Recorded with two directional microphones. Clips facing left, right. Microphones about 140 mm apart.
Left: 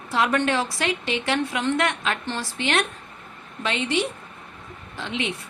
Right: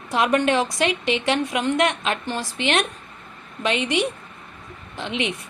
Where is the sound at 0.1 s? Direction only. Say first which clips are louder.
Right 3 dB; 20° right (ahead or behind).